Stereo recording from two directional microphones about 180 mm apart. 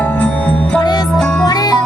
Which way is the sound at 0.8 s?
25° left (ahead or behind).